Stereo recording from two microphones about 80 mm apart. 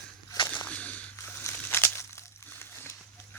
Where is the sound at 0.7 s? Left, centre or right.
Centre.